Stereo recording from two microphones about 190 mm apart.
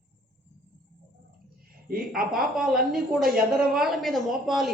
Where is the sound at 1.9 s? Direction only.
50° right (ahead or behind).